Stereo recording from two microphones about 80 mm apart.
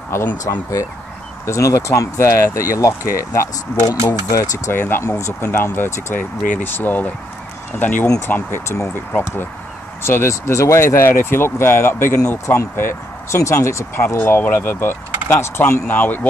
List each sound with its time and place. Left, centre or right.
0.1 s speech: left
1.4 s speech: left
4.6 s speech: left
8.3 s speech: left
14.0 s speech: left